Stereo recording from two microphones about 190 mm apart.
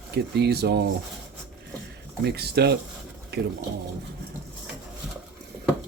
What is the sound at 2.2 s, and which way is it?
Speech, 60° right (ahead or behind).